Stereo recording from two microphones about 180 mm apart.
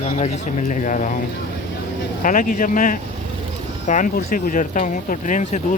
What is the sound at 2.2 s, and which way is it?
Speech, 50° left (ahead or behind).